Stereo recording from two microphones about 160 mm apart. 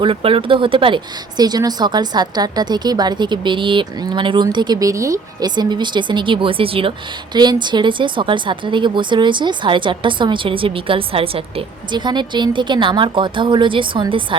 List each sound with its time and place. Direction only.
0.0 s speech: 35° right (ahead or behind)